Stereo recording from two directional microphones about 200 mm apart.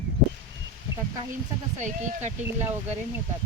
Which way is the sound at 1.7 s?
35° right (ahead or behind).